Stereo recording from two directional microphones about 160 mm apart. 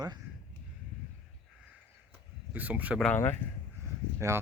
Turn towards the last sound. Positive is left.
turn(degrees=-15)  # may be behind; listen again after turning